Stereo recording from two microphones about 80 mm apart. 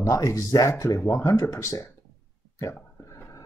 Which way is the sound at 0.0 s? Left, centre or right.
Left.